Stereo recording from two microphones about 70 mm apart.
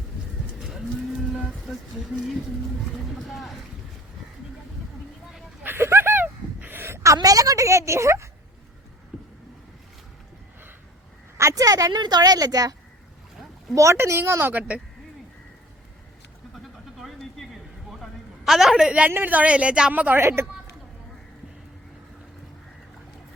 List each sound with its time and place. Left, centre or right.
1.3 s vehicle: centre
1.7 s speech: centre
3.2 s boat: centre
5.6 s a sound: right
7.2 s a woman's voice: right
9.1 s vehicle: centre
11.3 s a woman's voice: right
13.7 s speech: right
17.0 s a sound: centre
19.0 s speech: right
20.2 s speech: right